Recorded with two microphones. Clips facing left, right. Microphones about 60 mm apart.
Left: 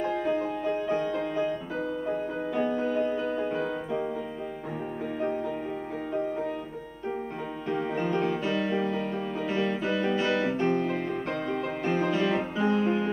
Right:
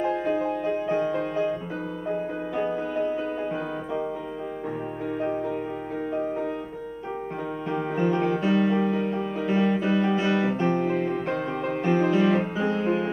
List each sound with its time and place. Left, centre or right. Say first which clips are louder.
0.0 s music: right 3 dB; centre
0.9 s music: right 3 dB; right
2.7 s music: even; centre
3.1 s music: right 1 dB; centre
7.7 s music: right 3 dB; centre